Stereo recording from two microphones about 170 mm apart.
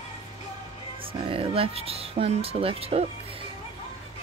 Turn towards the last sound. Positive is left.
turn(degrees=-35)  # may be behind; listen again after turning